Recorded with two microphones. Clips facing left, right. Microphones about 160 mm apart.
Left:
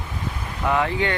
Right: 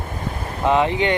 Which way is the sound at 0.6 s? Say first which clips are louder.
Right 4 dB; 20° right (ahead or behind).